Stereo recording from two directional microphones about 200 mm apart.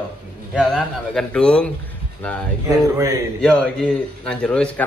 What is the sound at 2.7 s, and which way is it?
Speech, 15° right (ahead or behind).